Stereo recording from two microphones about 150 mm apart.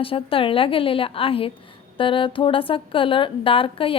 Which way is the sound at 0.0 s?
35° left (ahead or behind).